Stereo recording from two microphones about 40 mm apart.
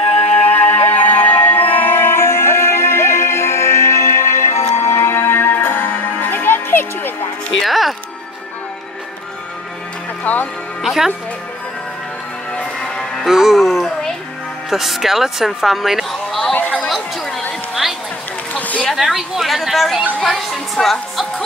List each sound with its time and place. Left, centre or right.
0.2 s music: left
7.6 s music: centre
10.2 s music: left
10.8 s music: centre
12.8 s music: centre
13.2 s music: centre
14.7 s speech: centre
18.5 s a sound: left
18.9 s chatter: centre
20.2 s music: centre